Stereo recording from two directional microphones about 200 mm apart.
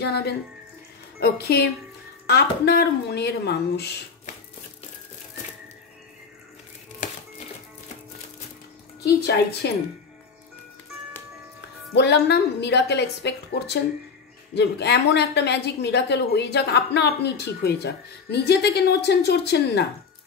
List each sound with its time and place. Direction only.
0.0 s a woman's voice: 55° left (ahead or behind)
9.0 s a woman's voice: 55° left (ahead or behind)
11.9 s a woman's voice: 60° left (ahead or behind)